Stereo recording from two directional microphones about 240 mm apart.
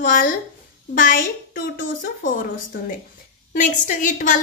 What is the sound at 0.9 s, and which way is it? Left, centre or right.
A woman's voice, left.